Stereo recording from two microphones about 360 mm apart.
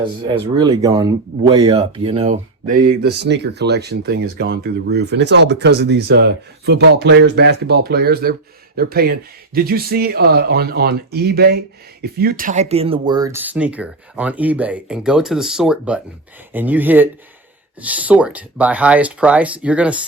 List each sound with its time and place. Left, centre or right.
0.3 s speech: centre